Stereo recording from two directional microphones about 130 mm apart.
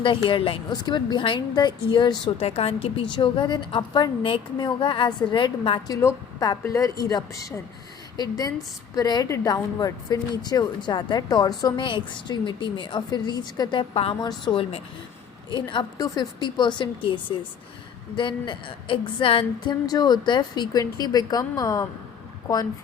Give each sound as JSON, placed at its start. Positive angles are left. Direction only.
{"t": 0.0, "sound": "speech", "side_deg": 40}
{"t": 5.9, "sound": "a woman's voice", "side_deg": 25}
{"t": 13.9, "sound": "a woman's voice", "side_deg": 50}
{"t": 14.2, "sound": "speech", "side_deg": 35}
{"t": 18.2, "sound": "speech", "side_deg": 40}
{"t": 19.9, "sound": "speech", "side_deg": 30}